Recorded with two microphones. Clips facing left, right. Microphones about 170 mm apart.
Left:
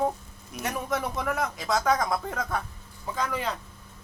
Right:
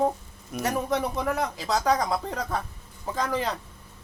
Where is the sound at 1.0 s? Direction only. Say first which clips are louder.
Right 2 dB; 30° right (ahead or behind).